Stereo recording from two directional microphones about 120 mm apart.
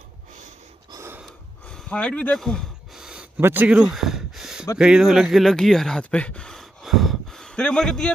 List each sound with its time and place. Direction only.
0.9 s gasp: 20° right (ahead or behind)
1.7 s a sound: 10° left (ahead or behind)
3.3 s speech: 20° right (ahead or behind); by 8.1 s 5° left (ahead or behind)